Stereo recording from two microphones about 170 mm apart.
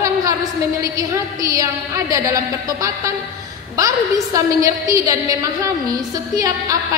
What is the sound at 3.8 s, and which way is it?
A woman's voice, 20° right (ahead or behind).